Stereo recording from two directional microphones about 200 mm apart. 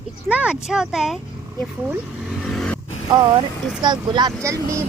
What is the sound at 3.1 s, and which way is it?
Speech, 30° right (ahead or behind).